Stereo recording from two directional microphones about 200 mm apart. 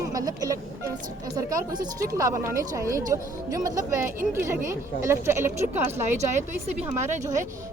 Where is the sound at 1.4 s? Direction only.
15° right (ahead or behind).